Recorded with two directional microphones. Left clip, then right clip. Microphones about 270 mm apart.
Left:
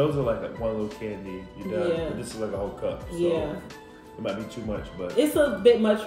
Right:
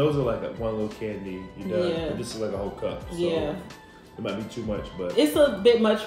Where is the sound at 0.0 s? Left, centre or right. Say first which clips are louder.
Right 1 dB; centre.